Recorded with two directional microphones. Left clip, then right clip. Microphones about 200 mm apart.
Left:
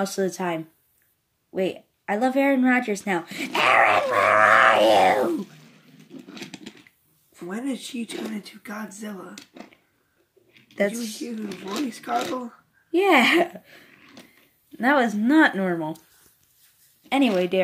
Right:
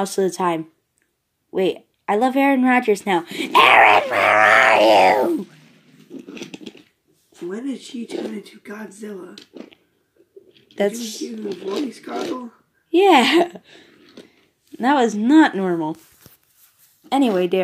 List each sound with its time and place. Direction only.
0.0 s speech: centre (ahead or behind)
7.4 s speech: 45° left (ahead or behind)
10.7 s speech: centre (ahead or behind)
11.4 s speech: 40° left (ahead or behind)
12.9 s speech: centre (ahead or behind)
17.1 s speech: 10° right (ahead or behind)